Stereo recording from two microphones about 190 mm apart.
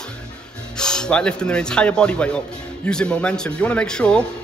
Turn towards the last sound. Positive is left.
turn(degrees=5)  # may be behind; listen again after turning